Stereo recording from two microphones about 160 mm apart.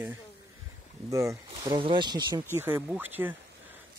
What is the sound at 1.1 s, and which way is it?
Speech, 20° right (ahead or behind).